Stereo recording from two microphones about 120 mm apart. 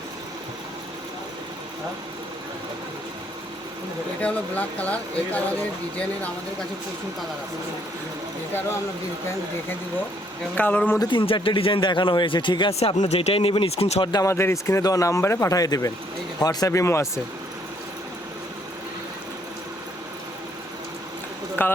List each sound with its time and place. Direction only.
4.2 s speech: 10° left (ahead or behind)
10.5 s speech: 10° left (ahead or behind)
11.0 s speech: 45° left (ahead or behind); by 14.0 s 60° left (ahead or behind)
14.0 s speech: 35° left (ahead or behind)
14.3 s speech: 20° left (ahead or behind)
21.6 s speech: 15° left (ahead or behind)